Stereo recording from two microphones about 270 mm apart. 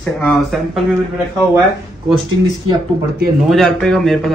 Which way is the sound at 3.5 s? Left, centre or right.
Centre.